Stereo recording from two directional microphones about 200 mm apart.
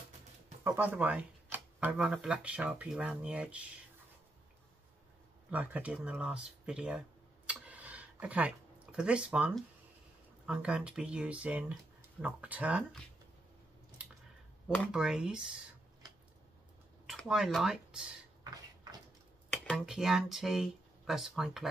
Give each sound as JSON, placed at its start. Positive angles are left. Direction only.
{"t": 0.7, "sound": "speech", "side_deg": -10}
{"t": 5.5, "sound": "speech", "side_deg": -10}
{"t": 14.9, "sound": "speech", "side_deg": -5}
{"t": 17.0, "sound": "speech", "side_deg": 0}
{"t": 18.4, "sound": "a sound", "side_deg": -20}
{"t": 19.6, "sound": "speech", "side_deg": 0}